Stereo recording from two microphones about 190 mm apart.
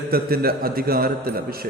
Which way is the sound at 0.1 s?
55° right (ahead or behind).